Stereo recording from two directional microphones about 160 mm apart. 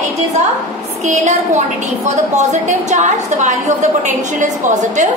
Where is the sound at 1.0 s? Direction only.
45° right (ahead or behind).